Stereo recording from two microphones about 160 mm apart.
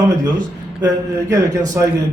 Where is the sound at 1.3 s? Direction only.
20° right (ahead or behind).